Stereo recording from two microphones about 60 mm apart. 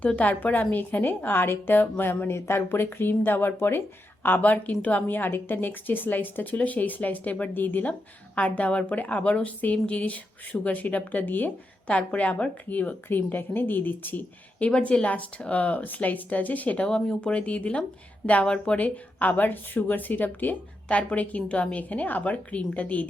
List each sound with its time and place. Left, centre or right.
0.0 s a woman's voice: left
14.7 s a woman's voice: centre
19.2 s a woman's voice: left